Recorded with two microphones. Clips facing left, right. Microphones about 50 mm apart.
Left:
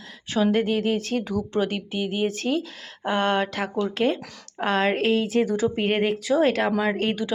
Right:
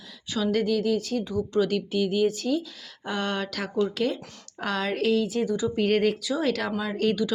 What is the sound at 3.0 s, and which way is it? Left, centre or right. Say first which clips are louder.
Speech: left 6 dB; left.